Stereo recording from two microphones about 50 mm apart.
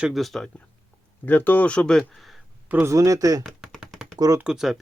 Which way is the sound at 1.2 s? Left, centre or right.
Left.